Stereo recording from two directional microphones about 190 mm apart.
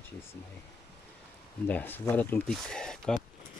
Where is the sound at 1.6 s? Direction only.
10° left (ahead or behind).